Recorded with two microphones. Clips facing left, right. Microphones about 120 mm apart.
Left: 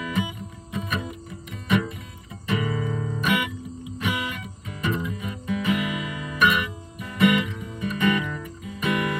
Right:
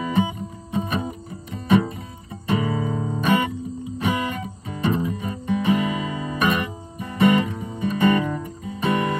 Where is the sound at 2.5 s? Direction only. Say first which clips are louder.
Right 3 dB; 35° right (ahead or behind).